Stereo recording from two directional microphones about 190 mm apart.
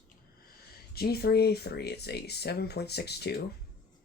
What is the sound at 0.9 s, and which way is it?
Speech, 55° left (ahead or behind).